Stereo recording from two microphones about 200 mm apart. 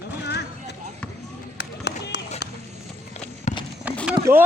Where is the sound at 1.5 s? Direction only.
55° left (ahead or behind).